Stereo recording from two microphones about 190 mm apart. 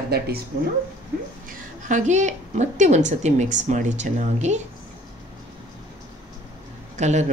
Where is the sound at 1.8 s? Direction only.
40° right (ahead or behind).